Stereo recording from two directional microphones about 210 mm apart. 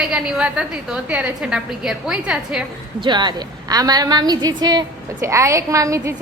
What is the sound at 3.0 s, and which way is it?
A woman's voice, 20° right (ahead or behind).